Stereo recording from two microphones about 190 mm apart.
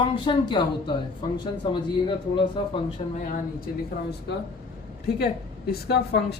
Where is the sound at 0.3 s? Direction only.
25° left (ahead or behind).